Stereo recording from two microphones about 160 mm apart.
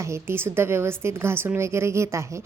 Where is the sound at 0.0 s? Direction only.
15° right (ahead or behind).